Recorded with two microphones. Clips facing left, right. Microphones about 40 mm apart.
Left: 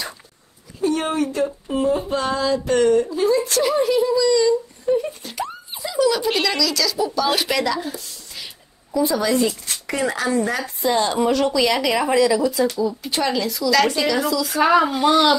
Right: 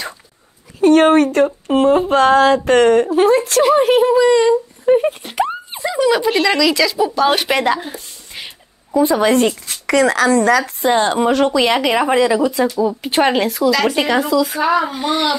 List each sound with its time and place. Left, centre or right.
0.7 s speech: right
5.9 s speech: right
7.5 s a woman's voice: right
9.8 s speech: right
10.6 s a woman's voice: right
13.7 s speech: right
13.9 s a woman's voice: right
14.3 s speech: right
14.6 s speech: centre
15.0 s a woman's voice: right